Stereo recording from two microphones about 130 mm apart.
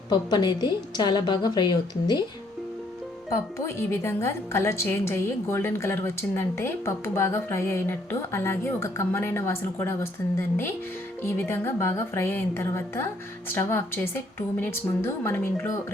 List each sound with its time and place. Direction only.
0.1 s a woman's voice: 35° left (ahead or behind)
3.2 s a woman's voice: 20° left (ahead or behind)